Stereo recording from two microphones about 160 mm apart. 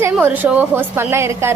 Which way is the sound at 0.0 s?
10° right (ahead or behind).